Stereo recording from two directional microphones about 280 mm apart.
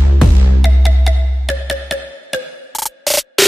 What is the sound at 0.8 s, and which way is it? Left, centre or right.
Music, centre.